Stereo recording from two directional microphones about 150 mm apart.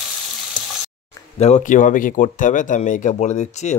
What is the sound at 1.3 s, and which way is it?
Speech, 45° left (ahead or behind).